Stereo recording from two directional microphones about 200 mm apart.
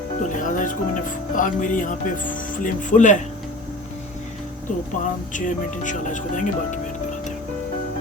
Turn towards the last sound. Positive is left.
turn(degrees=40)  # may be behind; listen again after turning